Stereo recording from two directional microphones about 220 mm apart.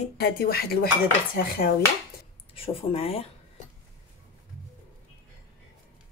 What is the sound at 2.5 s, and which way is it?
Speech, 25° left (ahead or behind).